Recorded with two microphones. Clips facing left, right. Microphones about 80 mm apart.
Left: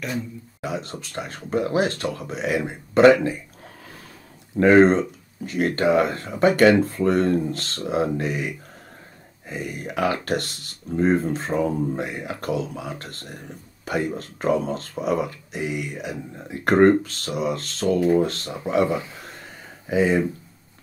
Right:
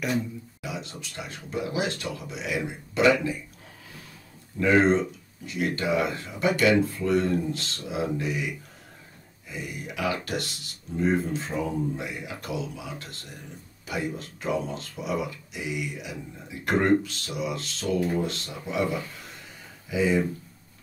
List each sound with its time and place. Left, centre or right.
0.6 s speech: left
4.8 s speech: left